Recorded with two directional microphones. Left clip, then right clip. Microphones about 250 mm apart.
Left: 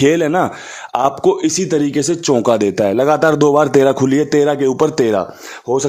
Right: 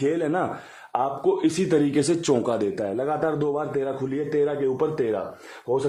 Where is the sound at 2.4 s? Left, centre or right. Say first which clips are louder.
Left 11 dB; left.